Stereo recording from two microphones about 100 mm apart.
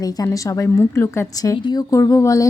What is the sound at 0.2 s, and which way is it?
A woman's voice, 35° left (ahead or behind).